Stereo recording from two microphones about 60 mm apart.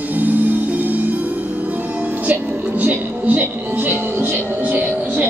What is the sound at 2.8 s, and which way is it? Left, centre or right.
Speech, right.